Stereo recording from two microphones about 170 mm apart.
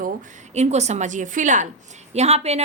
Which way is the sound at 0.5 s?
40° right (ahead or behind).